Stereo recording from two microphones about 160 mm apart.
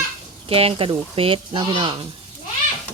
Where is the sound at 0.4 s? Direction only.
35° right (ahead or behind).